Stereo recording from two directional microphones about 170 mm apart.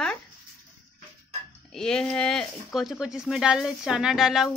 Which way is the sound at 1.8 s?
5° left (ahead or behind).